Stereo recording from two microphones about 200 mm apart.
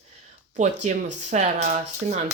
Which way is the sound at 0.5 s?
35° right (ahead or behind).